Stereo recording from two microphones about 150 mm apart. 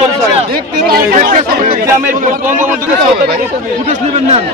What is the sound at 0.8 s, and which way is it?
Speech, 80° right.